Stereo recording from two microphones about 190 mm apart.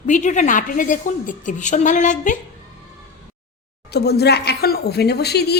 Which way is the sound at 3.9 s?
60° left (ahead or behind).